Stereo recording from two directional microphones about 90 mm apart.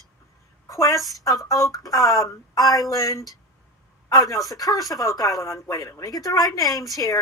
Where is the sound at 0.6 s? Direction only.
35° left (ahead or behind).